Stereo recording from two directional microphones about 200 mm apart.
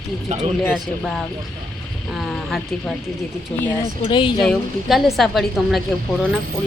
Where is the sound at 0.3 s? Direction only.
35° right (ahead or behind).